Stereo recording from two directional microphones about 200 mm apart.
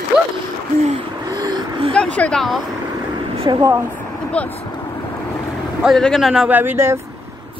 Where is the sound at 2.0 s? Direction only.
5° left (ahead or behind).